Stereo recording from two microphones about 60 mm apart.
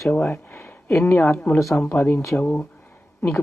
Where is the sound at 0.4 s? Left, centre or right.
Left.